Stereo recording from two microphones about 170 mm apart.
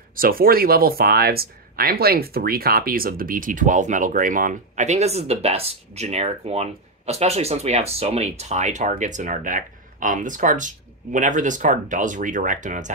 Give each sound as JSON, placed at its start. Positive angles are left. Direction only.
{"t": 0.1, "sound": "speech", "side_deg": -55}